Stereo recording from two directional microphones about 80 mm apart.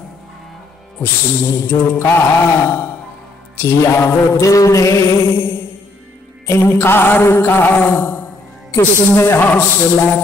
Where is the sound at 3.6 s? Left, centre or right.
Left.